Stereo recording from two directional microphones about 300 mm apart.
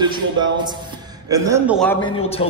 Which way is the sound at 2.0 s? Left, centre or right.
Centre.